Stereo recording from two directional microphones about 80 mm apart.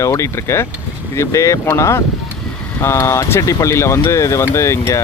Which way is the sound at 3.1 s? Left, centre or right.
Left.